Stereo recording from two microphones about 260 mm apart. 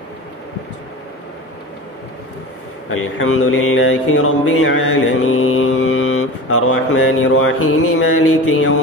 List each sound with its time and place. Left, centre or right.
2.9 s mantra: left